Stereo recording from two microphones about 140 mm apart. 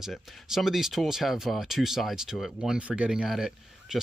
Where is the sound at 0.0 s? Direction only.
Centre (ahead or behind).